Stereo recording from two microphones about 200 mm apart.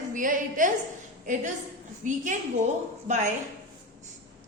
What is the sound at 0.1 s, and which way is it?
Speech, 40° right (ahead or behind).